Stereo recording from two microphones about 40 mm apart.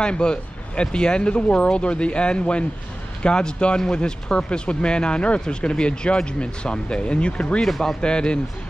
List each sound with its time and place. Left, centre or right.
0.0 s speech: left
7.6 s speech: centre
8.0 s speech: left